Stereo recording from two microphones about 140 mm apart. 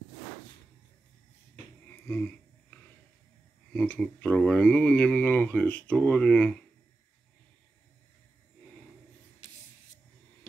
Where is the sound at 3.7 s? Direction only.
10° left (ahead or behind).